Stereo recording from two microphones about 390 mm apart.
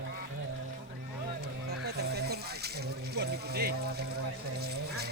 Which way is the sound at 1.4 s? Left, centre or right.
Right.